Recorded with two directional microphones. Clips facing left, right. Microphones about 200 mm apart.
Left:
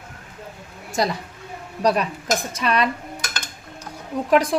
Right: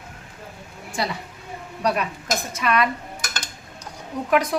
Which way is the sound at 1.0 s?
40° left (ahead or behind).